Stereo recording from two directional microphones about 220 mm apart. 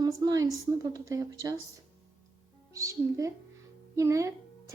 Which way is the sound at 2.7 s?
15° right (ahead or behind).